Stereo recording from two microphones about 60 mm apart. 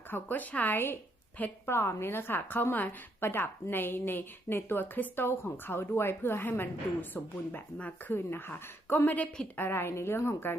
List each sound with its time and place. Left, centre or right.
0.1 s a woman's voice: left
1.6 s a woman's voice: left
8.1 s a woman's voice: left